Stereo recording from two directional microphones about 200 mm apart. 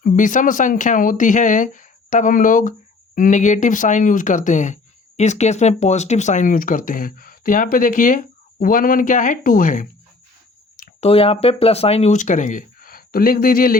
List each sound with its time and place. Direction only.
0.0 s speech: 40° left (ahead or behind)
11.0 s speech: 30° left (ahead or behind); by 13.7 s 45° left (ahead or behind)